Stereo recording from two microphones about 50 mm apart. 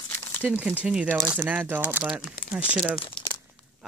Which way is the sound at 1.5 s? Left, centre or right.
Right.